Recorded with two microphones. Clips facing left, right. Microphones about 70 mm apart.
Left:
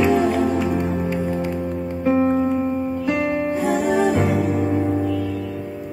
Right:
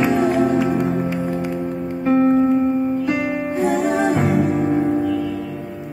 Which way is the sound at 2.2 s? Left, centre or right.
Centre.